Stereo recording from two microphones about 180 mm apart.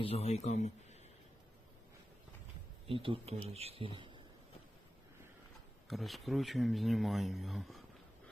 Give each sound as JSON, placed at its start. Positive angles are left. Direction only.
{"t": 0.0, "sound": "speech", "side_deg": 35}
{"t": 2.8, "sound": "speech", "side_deg": -30}
{"t": 5.9, "sound": "speech", "side_deg": 0}